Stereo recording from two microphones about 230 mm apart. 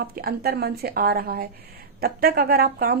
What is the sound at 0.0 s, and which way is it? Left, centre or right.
A woman's voice, right.